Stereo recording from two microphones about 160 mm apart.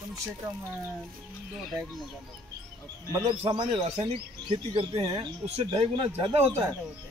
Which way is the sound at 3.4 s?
25° right (ahead or behind).